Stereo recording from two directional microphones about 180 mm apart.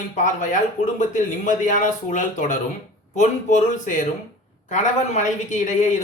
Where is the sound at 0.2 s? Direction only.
45° left (ahead or behind).